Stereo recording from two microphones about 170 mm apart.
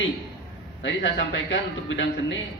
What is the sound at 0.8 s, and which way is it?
A man's voice, 90° left.